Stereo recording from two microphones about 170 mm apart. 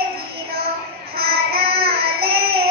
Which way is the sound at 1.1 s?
65° right (ahead or behind).